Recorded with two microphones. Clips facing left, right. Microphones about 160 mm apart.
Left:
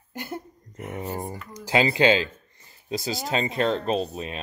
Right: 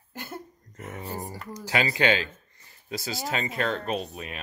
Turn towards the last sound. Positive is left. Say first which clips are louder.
# left 5 dB
turn(degrees=25)  # may be behind; listen again after turning